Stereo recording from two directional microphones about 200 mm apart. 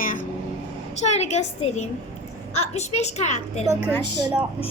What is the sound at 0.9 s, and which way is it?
A child's voice, 35° left (ahead or behind).